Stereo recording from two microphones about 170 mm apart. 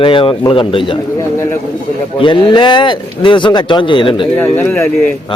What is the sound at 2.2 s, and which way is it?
Speech, 30° left (ahead or behind).